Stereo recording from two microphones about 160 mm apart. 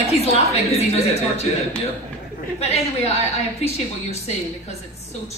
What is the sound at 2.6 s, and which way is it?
A woman's voice, 40° left (ahead or behind).